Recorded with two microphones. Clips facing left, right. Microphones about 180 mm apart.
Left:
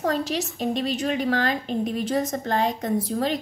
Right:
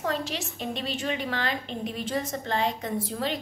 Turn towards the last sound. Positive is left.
turn(degrees=40)  # may be behind; listen again after turning